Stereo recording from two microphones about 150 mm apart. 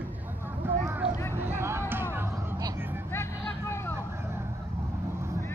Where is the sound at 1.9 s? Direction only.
15° right (ahead or behind).